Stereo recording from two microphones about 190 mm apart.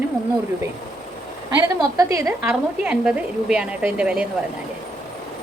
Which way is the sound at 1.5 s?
15° right (ahead or behind).